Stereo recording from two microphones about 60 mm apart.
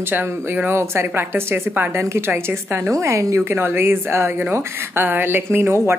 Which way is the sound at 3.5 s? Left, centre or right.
Right.